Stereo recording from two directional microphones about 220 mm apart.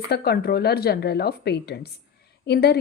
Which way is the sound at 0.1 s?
45° left (ahead or behind).